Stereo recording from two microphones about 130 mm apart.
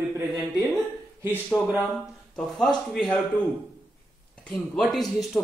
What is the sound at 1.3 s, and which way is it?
Speech, 15° left (ahead or behind).